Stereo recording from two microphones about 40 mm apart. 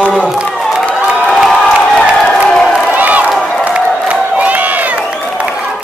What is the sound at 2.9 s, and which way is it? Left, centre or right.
Crowd, right.